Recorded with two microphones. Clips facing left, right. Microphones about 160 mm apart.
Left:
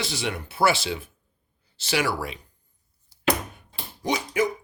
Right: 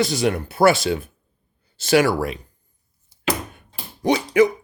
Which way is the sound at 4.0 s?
65° right (ahead or behind).